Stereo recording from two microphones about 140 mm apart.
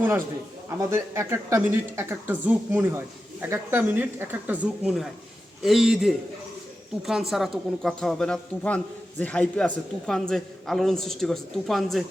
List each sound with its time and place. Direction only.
0.7 s a woman's voice: 20° right (ahead or behind); by 12.0 s centre (ahead or behind)